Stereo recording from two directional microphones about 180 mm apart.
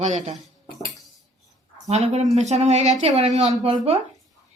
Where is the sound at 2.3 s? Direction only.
40° right (ahead or behind).